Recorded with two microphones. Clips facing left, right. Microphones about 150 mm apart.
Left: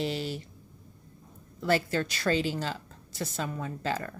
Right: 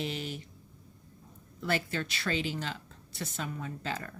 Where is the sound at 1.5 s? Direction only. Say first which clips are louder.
Left 5 dB; 35° left (ahead or behind).